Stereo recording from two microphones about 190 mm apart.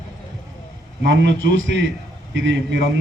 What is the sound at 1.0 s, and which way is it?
A man's voice, 75° right (ahead or behind).